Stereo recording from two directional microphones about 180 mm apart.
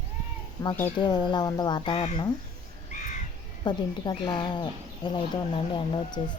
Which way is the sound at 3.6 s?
25° left (ahead or behind).